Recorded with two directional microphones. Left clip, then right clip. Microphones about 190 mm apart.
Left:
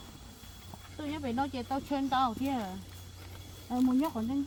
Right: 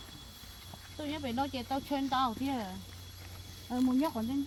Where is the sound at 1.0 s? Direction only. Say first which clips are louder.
Left 1 dB; centre (ahead or behind).